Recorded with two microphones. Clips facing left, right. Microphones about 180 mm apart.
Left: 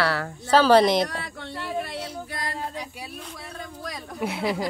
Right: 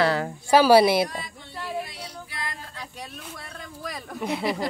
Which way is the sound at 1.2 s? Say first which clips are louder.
Left 3 dB; 70° left (ahead or behind).